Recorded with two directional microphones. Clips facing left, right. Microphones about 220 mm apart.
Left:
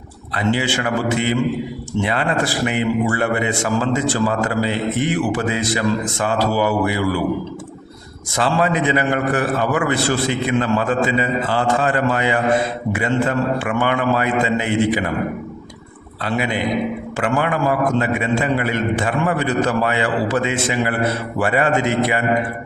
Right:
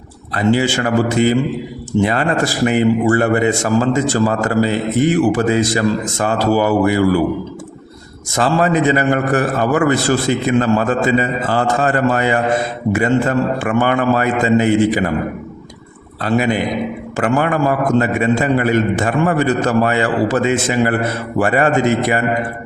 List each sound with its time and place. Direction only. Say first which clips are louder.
0.3 s a man's voice: right 5 dB; 40° right (ahead or behind)
8.4 s a man's voice: right 4 dB; 45° right (ahead or behind)
16.2 s a man's voice: right 5 dB; 40° right (ahead or behind)